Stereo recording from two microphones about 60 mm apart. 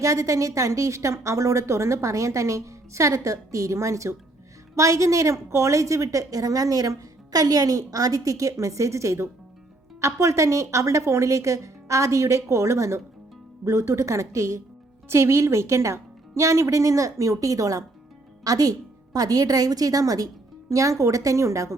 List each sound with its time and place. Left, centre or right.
0.0 s a woman's voice: right
18.4 s a woman's voice: right